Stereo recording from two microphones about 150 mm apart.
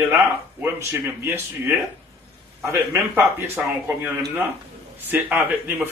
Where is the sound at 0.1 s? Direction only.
15° right (ahead or behind).